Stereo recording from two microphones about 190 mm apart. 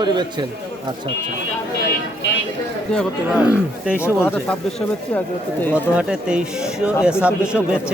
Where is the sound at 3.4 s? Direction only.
5° right (ahead or behind).